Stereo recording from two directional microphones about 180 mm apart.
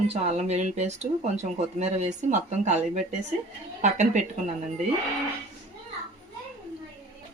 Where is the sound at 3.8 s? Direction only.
40° right (ahead or behind).